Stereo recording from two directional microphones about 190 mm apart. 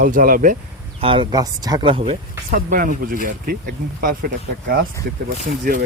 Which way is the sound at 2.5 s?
45° right (ahead or behind).